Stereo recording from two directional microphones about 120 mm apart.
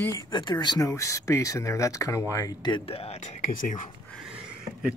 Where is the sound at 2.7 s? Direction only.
55° left (ahead or behind).